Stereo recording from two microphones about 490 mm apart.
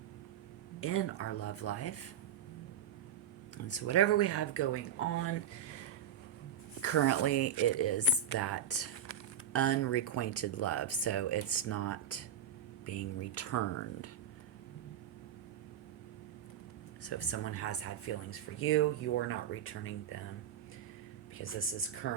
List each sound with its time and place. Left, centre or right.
0.8 s speech: left
3.7 s speech: left
6.8 s speech: left
17.0 s speech: left
21.3 s speech: left